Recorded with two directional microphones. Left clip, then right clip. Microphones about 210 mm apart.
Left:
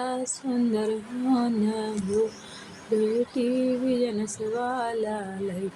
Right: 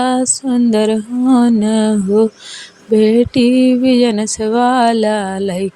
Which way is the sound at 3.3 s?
50° right (ahead or behind).